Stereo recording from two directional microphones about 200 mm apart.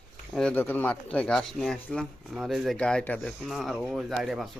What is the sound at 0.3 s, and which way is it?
Speech, 5° left (ahead or behind).